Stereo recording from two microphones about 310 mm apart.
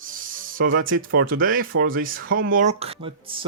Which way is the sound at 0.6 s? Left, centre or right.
Right.